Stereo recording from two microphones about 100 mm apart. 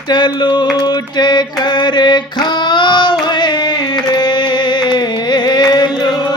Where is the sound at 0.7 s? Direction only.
45° left (ahead or behind).